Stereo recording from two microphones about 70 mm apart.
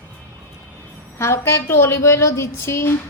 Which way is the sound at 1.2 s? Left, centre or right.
Left.